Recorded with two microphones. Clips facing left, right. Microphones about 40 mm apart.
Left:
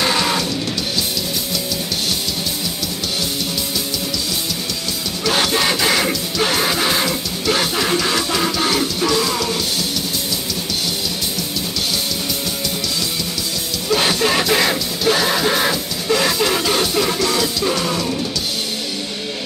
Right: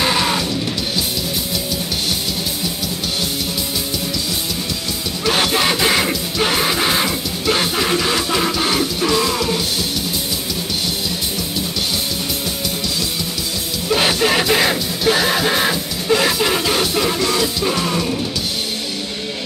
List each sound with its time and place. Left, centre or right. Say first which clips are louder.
0.0 s music: even; centre
5.3 s music: right 1 dB; centre
13.8 s music: right 1 dB; centre